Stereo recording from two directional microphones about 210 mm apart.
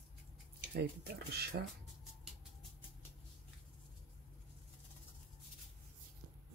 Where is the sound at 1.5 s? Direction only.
50° right (ahead or behind).